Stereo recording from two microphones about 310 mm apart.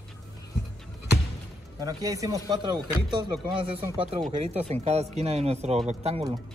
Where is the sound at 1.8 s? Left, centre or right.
Centre.